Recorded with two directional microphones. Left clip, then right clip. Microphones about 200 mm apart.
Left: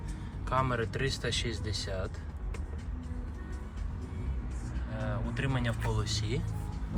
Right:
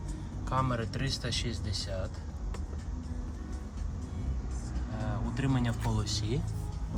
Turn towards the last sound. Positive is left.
turn(degrees=-25)  # may be behind; listen again after turning